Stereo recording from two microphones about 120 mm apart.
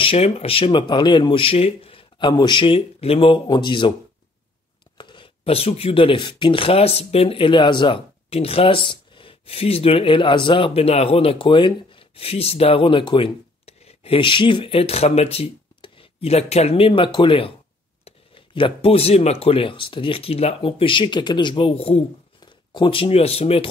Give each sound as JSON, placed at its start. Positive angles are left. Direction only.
{"t": 0.0, "sound": "speech", "side_deg": 55}
{"t": 3.4, "sound": "speech", "side_deg": 40}
{"t": 4.9, "sound": "speech", "side_deg": 40}
{"t": 22.4, "sound": "speech", "side_deg": 45}